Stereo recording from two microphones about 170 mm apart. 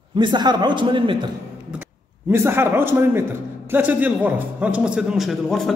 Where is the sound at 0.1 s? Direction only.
25° right (ahead or behind).